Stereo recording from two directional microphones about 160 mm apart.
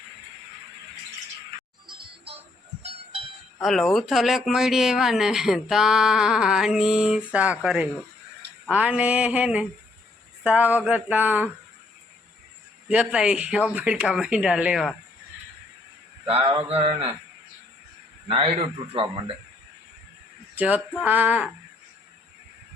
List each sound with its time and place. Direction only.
3.6 s speech: centre (ahead or behind)
7.3 s a sound: 10° right (ahead or behind)
12.9 s speech: 5° right (ahead or behind)
16.2 s a man's voice: 40° right (ahead or behind)
18.3 s a man's voice: 35° right (ahead or behind)
20.6 s a sound: 10° right (ahead or behind)